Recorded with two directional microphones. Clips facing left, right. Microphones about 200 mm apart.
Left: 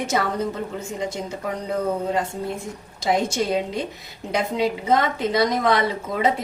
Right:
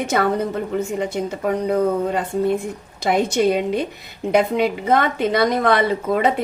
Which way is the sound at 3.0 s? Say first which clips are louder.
Right 4 dB; 60° right (ahead or behind).